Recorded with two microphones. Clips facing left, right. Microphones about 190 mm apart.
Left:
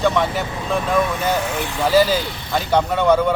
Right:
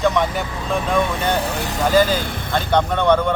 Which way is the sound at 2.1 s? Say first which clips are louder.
Left 1 dB; 50° right (ahead or behind).